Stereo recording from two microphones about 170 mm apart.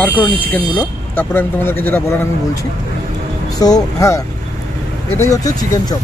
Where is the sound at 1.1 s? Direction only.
15° left (ahead or behind).